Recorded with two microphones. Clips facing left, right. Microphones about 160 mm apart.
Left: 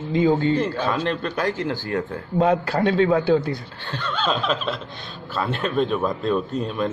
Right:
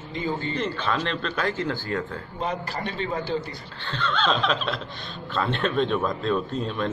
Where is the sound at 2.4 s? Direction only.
65° left (ahead or behind).